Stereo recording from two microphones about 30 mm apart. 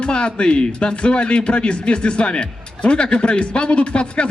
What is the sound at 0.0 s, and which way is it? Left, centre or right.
Speech, left.